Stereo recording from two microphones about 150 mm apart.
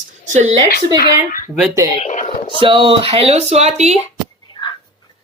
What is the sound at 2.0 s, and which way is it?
Speech, 55° left (ahead or behind).